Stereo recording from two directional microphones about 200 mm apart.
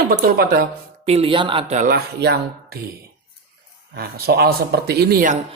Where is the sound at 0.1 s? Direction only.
50° right (ahead or behind).